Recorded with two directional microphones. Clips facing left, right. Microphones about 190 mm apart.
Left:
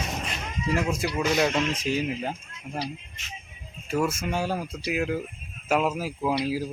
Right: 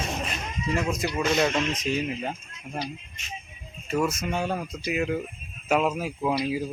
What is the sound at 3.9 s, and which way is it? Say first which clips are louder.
Speech: even; 10° left (ahead or behind).